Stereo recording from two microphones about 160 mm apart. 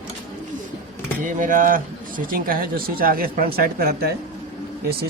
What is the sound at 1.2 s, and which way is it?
Speech, 55° right (ahead or behind).